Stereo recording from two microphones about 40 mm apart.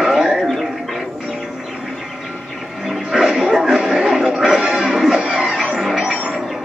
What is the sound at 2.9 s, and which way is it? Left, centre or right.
Music, centre.